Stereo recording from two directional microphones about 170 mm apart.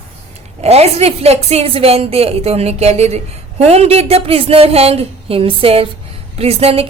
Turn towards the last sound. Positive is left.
turn(degrees=-35)  # may be behind; listen again after turning